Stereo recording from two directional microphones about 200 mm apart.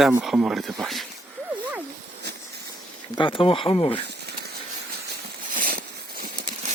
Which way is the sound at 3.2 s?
25° left (ahead or behind).